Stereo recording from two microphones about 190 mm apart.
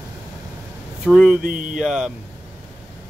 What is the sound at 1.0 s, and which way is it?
Speech, centre (ahead or behind).